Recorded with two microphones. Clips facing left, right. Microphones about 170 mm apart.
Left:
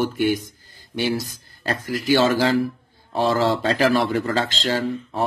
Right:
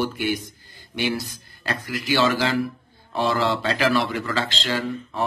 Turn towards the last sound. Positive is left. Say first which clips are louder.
# left 3 dB
turn(degrees=40)  # may be behind; listen again after turning